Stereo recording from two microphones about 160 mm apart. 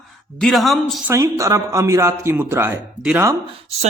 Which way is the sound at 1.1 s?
15° right (ahead or behind).